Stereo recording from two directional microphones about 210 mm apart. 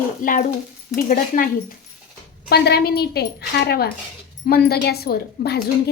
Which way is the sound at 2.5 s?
50° left (ahead or behind).